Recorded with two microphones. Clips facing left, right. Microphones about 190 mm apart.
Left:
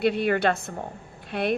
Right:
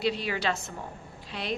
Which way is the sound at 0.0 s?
55° left (ahead or behind).